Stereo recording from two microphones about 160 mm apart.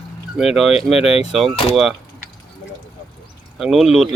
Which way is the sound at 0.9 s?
40° left (ahead or behind).